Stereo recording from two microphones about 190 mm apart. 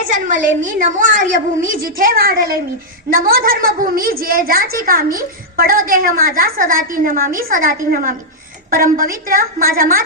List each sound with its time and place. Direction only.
0.1 s a woman's voice: 45° right (ahead or behind)